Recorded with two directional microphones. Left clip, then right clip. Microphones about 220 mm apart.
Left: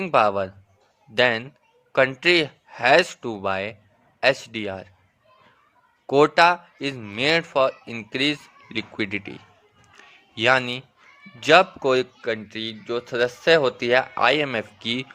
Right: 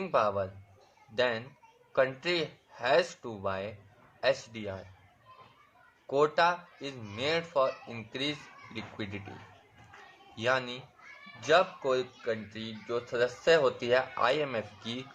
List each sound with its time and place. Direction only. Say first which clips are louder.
0.0 s speech: left 9 dB; 40° left (ahead or behind)
6.1 s speech: left 10 dB; 40° left (ahead or behind)
10.3 s speech: left 11 dB; 40° left (ahead or behind)